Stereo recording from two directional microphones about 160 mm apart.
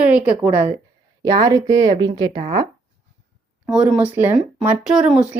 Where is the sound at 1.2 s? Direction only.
20° right (ahead or behind).